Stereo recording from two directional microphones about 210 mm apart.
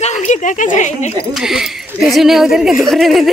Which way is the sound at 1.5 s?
Centre (ahead or behind).